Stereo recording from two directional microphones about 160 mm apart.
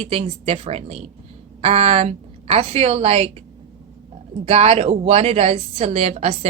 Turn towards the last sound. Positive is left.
turn(degrees=-40)  # may be behind; listen again after turning